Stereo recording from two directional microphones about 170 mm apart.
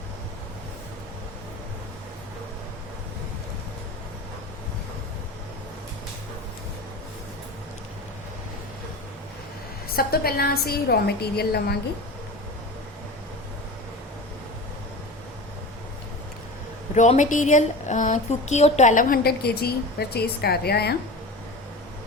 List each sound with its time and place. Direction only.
9.9 s a woman's voice: 65° left (ahead or behind)
16.9 s speech: 45° left (ahead or behind); by 20.9 s 70° left (ahead or behind)